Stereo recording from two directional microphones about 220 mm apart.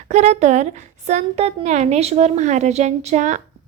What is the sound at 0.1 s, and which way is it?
A woman's voice, 30° right (ahead or behind).